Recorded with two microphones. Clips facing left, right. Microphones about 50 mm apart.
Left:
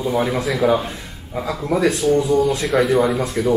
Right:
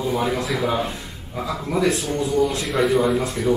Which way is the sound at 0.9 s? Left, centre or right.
Centre.